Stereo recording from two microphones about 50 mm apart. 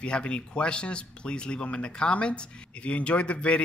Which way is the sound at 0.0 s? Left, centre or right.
Left.